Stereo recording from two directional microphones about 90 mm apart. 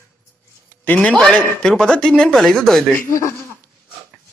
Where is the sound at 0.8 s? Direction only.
15° left (ahead or behind).